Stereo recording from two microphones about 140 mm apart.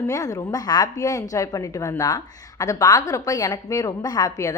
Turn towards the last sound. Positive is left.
turn(degrees=25)  # may be behind; listen again after turning